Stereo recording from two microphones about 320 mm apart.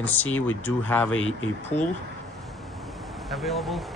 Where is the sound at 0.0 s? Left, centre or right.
Centre.